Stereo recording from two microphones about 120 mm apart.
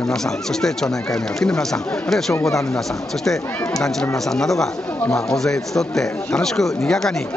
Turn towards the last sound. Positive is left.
turn(degrees=5)  # may be behind; listen again after turning